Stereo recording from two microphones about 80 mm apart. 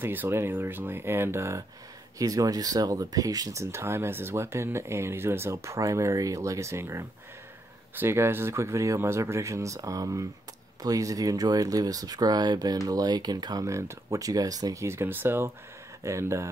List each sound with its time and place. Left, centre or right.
0.0 s speech: right
2.1 s speech: right
13.7 s speech: right
16.0 s speech: right